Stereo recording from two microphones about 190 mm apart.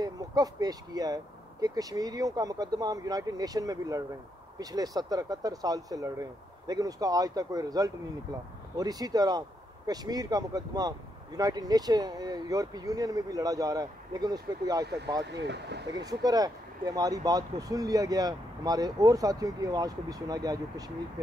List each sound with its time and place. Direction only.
0.0 s speech: 20° right (ahead or behind)
15.2 s speech: 65° right (ahead or behind)
15.9 s speech: 20° right (ahead or behind)